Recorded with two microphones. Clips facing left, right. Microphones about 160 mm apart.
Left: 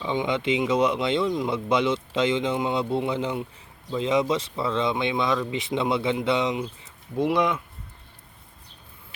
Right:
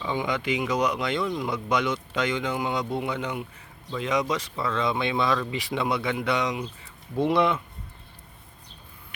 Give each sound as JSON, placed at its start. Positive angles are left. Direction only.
{"t": 0.0, "sound": "speech", "side_deg": 20}
{"t": 7.2, "sound": "speech", "side_deg": 10}